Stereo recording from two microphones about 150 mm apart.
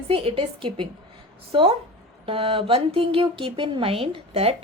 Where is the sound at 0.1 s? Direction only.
40° right (ahead or behind).